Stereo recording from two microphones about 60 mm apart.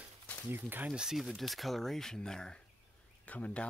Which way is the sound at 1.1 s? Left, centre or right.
Centre.